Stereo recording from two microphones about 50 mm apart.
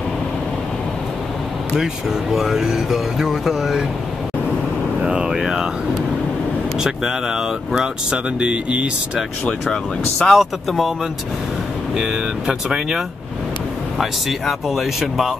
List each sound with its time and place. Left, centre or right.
2.3 s speech: centre
5.0 s speech: centre
6.8 s speech: centre
9.5 s speech: centre
10.3 s speech: centre
12.0 s speech: centre